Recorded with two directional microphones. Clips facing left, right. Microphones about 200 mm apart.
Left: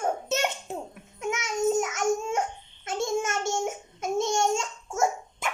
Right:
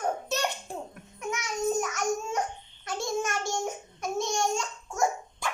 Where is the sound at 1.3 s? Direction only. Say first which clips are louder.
Left 3 dB; 20° left (ahead or behind).